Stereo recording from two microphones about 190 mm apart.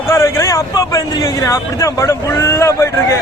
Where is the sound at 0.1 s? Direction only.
15° left (ahead or behind).